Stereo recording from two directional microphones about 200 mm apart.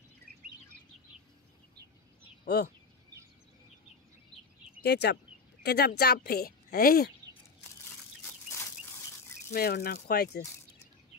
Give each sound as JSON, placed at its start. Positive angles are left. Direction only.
{"t": 2.4, "sound": "speech", "side_deg": 55}
{"t": 4.8, "sound": "speech", "side_deg": 55}
{"t": 9.5, "sound": "speech", "side_deg": 50}